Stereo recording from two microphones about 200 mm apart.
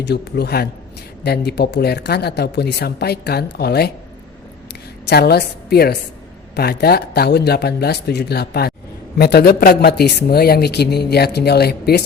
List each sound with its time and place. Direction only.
0.0 s speech: 55° left (ahead or behind)
5.0 s speech: 55° left (ahead or behind)